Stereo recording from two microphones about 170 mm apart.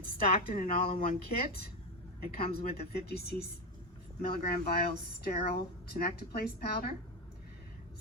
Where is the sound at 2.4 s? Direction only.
35° left (ahead or behind).